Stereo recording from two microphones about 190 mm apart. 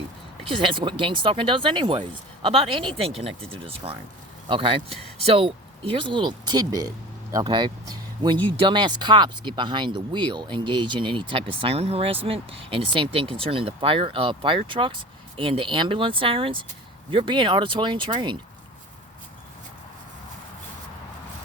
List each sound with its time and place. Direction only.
0.4 s speech: 25° right (ahead or behind)